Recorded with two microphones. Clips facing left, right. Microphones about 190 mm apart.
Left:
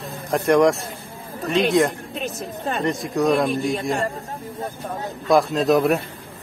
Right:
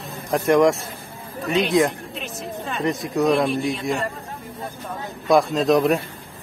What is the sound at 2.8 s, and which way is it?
Speech, centre (ahead or behind).